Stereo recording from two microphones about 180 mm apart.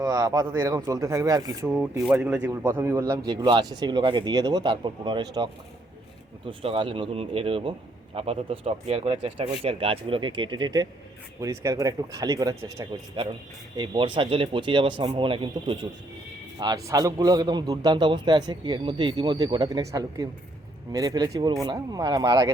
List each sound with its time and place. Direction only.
0.0 s a man's voice: 20° right (ahead or behind)
1.6 s speech: 5° right (ahead or behind)
2.5 s a man's voice: 15° right (ahead or behind)